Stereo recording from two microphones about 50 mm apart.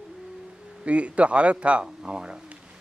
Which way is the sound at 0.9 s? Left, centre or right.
Right.